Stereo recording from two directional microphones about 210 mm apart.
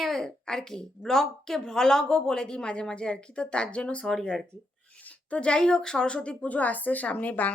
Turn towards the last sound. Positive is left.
turn(degrees=5)  # may be behind; listen again after turning